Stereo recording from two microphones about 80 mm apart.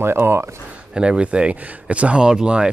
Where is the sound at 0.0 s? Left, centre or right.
Right.